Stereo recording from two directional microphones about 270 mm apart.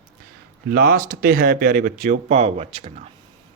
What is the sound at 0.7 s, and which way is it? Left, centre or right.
A man's voice, right.